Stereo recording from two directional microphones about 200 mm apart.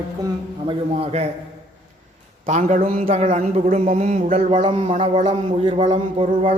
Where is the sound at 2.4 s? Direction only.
40° right (ahead or behind).